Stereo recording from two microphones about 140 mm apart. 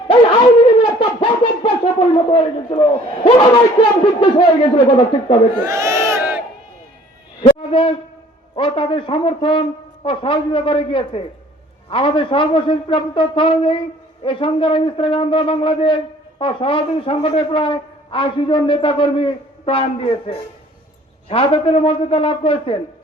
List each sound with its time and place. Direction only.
0.1 s a sound: 35° left (ahead or behind)
5.6 s crowd: 20° right (ahead or behind)
7.7 s owl: 40° left (ahead or behind)
8.5 s speech: 40° left (ahead or behind)